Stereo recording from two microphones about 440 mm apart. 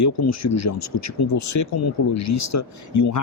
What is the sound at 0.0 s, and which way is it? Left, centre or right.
Speech, left.